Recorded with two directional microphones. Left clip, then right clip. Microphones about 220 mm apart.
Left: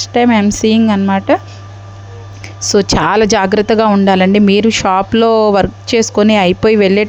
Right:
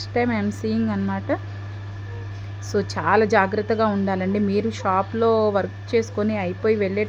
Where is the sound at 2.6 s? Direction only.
40° left (ahead or behind).